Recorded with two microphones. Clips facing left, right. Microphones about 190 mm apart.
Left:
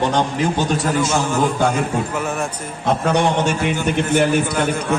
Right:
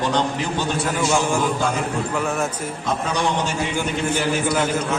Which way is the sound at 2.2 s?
Centre (ahead or behind).